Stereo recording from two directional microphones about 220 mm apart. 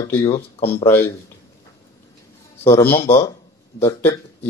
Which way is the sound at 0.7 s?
10° left (ahead or behind).